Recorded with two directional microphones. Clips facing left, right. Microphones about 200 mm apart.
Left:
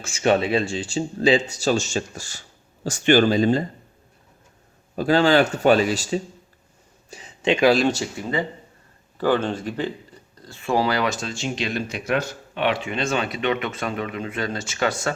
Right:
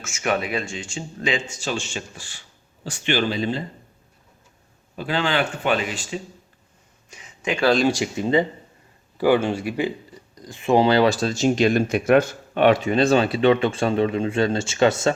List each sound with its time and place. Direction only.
0.0 s speech: 30° left (ahead or behind)
4.9 s speech: 40° left (ahead or behind)
7.1 s a sound: 30° left (ahead or behind)
7.9 s speech: 15° right (ahead or behind)
9.1 s speech: 10° right (ahead or behind)